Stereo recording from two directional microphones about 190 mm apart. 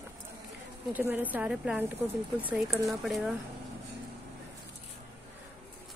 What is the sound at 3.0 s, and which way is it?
Speech, centre (ahead or behind).